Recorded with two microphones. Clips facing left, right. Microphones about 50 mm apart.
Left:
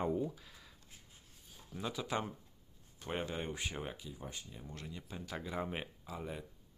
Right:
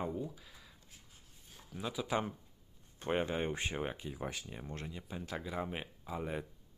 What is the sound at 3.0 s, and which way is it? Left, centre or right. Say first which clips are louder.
Speech: right 5 dB; right.